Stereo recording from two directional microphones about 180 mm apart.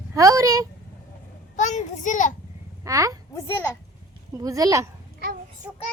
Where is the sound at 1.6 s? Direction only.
45° left (ahead or behind).